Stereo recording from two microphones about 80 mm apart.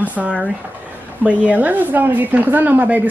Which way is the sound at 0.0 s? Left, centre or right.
Centre.